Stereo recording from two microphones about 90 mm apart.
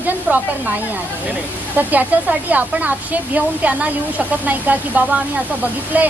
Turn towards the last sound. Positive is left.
turn(degrees=-20)  # may be behind; listen again after turning